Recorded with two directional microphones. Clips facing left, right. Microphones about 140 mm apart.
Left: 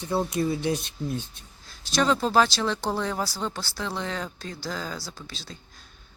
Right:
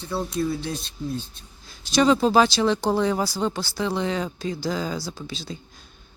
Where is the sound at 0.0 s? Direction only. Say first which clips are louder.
Left 2 dB; 20° left (ahead or behind).